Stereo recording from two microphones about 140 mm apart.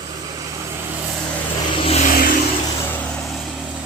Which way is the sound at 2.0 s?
80° left.